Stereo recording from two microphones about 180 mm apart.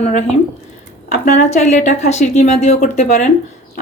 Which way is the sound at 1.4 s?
40° left (ahead or behind).